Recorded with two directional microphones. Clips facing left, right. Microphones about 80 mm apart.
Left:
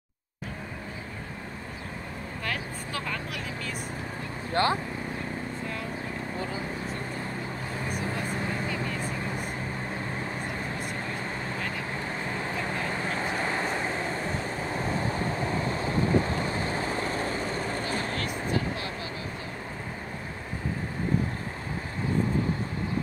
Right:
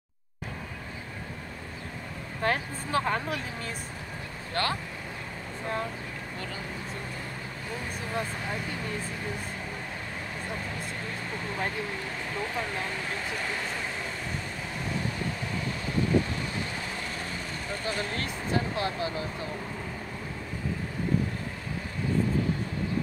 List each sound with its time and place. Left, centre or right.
2.4 s speech: right
4.6 s speech: left
12.6 s vehicle: left
18.1 s vehicle: right